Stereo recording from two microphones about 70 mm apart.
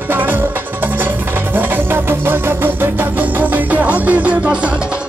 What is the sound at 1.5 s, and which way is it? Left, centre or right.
Music, right.